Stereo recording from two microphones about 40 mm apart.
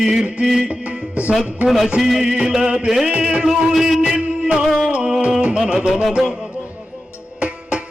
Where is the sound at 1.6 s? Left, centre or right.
Centre.